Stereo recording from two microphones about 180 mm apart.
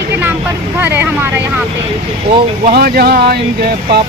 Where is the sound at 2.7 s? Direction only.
60° right (ahead or behind).